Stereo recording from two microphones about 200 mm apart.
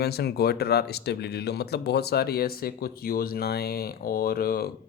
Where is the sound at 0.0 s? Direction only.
55° left (ahead or behind).